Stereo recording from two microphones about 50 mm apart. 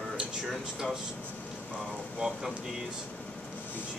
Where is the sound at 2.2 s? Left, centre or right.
Centre.